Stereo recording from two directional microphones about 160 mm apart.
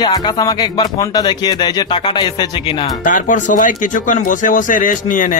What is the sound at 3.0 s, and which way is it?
Speech, 55° left (ahead or behind).